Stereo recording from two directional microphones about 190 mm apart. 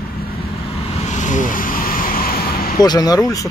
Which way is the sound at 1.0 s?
40° left (ahead or behind).